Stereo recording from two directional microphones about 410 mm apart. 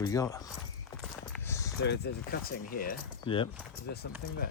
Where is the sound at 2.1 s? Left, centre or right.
Left.